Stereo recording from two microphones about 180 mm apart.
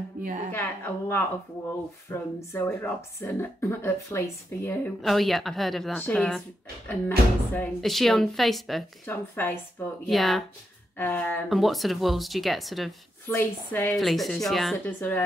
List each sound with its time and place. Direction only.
0.2 s a woman's voice: 45° right (ahead or behind)
0.5 s a woman's voice: 15° left (ahead or behind)
11.4 s speech: centre (ahead or behind)
13.3 s a woman's voice: 10° left (ahead or behind)